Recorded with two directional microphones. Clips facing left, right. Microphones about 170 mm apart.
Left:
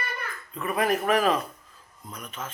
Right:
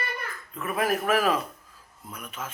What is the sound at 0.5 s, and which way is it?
A man's voice, centre (ahead or behind).